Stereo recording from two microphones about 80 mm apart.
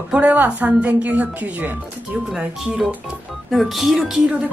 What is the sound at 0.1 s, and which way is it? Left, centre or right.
A woman's voice, centre.